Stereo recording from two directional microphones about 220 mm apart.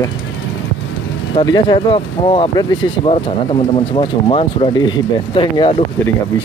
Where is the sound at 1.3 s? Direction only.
20° left (ahead or behind).